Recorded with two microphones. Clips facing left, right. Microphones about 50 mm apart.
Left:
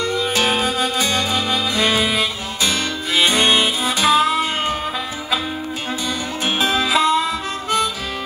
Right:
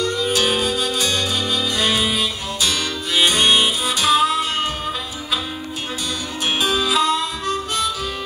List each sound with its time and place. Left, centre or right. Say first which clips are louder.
0.2 s music: left 1 dB; left
6.4 s music: left 1 dB; left